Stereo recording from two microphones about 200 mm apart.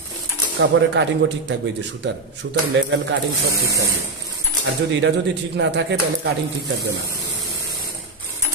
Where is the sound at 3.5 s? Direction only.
15° right (ahead or behind).